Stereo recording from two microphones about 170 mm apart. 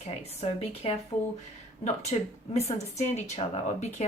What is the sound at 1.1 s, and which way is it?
Speech, 40° left (ahead or behind).